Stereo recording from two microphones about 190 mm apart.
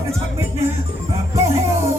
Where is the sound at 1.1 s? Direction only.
15° right (ahead or behind).